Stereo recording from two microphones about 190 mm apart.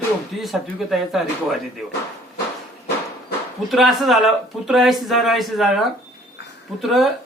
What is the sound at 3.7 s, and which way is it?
Speech, centre (ahead or behind).